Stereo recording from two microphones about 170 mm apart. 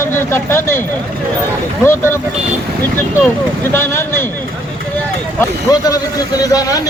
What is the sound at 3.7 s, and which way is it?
Speech, 15° left (ahead or behind).